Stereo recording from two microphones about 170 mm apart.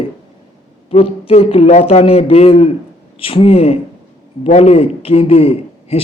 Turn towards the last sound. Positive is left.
turn(degrees=35)  # may be behind; listen again after turning